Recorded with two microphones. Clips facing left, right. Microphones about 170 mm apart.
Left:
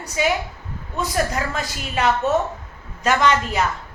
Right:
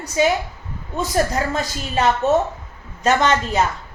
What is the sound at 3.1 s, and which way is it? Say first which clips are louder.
Speech: right 1 dB; 25° right (ahead or behind).